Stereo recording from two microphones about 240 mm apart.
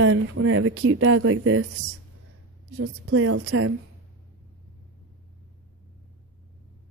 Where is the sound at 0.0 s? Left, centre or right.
Right.